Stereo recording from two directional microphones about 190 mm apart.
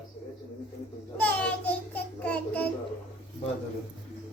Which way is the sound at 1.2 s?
10° left (ahead or behind).